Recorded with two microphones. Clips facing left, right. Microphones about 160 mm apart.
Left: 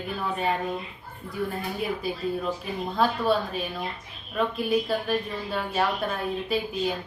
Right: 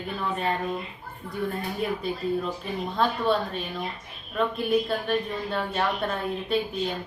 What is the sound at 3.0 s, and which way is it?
A woman's voice, 5° left (ahead or behind).